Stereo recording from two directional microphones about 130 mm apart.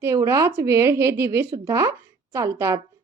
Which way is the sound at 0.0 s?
25° right (ahead or behind).